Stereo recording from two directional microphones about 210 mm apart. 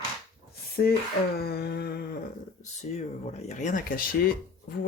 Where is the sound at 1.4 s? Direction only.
50° left (ahead or behind).